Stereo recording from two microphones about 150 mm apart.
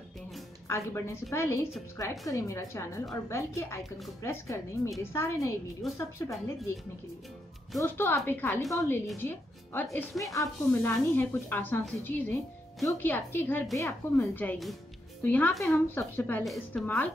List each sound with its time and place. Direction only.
0.7 s a woman's voice: 20° left (ahead or behind)
7.8 s speech: 15° left (ahead or behind)